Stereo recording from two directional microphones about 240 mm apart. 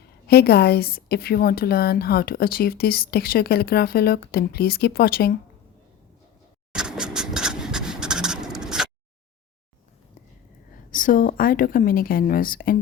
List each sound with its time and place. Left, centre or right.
0.3 s a woman's voice: left
6.7 s a sound: centre
10.9 s a woman's voice: left